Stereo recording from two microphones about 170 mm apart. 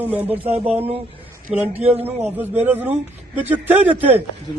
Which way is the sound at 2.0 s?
10° right (ahead or behind).